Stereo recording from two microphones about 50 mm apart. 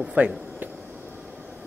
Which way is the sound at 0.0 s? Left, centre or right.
Right.